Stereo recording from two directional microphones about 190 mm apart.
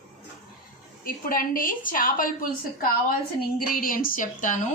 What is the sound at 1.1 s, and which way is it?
A woman's voice, 50° left (ahead or behind).